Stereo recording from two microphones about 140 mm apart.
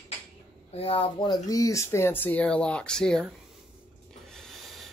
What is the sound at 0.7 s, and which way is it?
Speech, 40° left (ahead or behind).